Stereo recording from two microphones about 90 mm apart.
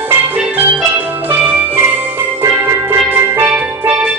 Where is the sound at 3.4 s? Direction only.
20° right (ahead or behind).